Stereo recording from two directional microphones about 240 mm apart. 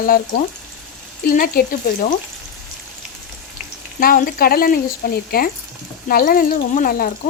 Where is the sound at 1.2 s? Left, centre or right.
Left.